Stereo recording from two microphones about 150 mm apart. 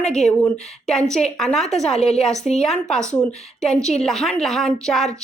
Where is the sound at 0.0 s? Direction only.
5° left (ahead or behind).